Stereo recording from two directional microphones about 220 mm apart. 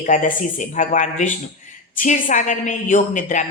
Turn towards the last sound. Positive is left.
turn(degrees=35)  # may be behind; listen again after turning